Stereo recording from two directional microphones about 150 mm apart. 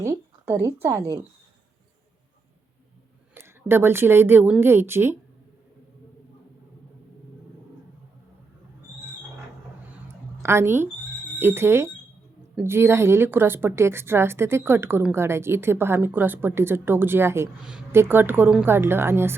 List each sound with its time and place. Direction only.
0.0 s a woman's voice: 15° right (ahead or behind)
3.3 s a woman's voice: 15° right (ahead or behind)
10.4 s a woman's voice: 15° right (ahead or behind)